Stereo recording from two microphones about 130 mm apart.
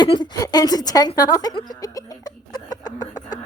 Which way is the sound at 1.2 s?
30° left (ahead or behind).